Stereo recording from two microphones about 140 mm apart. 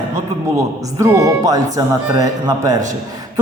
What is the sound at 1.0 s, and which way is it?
Speech, 20° right (ahead or behind).